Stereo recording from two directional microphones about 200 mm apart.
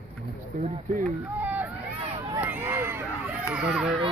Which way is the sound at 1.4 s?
10° right (ahead or behind).